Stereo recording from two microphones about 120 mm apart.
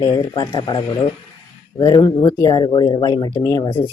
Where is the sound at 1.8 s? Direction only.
35° left (ahead or behind).